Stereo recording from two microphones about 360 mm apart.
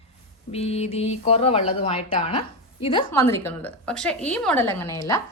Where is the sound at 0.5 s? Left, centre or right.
Centre.